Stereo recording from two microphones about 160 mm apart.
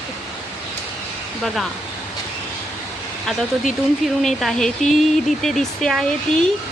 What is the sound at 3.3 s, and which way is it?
Speech, centre (ahead or behind).